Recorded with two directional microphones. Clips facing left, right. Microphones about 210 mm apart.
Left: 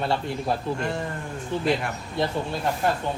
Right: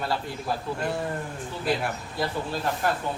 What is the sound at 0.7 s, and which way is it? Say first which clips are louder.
Speech: left 1 dB; 5° right (ahead or behind).